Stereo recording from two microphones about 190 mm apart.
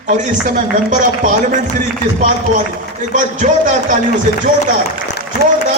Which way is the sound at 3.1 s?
40° right (ahead or behind).